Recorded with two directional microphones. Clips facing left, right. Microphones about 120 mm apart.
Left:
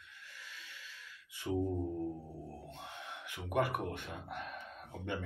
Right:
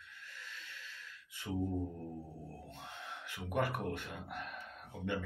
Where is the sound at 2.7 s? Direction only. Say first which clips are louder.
Left 1 dB; 20° left (ahead or behind).